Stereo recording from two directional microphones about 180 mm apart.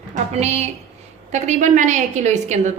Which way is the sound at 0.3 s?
40° right (ahead or behind).